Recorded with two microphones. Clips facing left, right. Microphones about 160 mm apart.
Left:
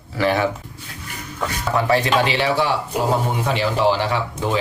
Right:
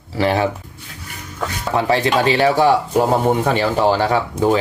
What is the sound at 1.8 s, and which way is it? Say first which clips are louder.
Speech: right 2 dB; 30° right (ahead or behind).